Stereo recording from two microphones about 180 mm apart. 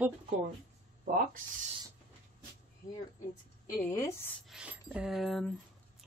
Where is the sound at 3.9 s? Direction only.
15° left (ahead or behind).